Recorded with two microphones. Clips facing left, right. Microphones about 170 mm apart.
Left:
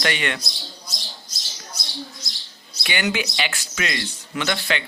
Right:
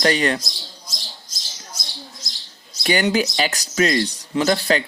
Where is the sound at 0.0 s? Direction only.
35° right (ahead or behind).